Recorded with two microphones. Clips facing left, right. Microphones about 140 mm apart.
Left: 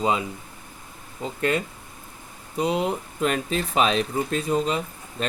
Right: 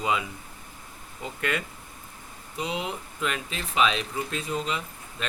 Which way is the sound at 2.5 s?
40° left (ahead or behind).